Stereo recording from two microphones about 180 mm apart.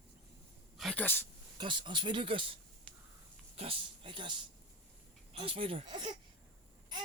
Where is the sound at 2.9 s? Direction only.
5° left (ahead or behind).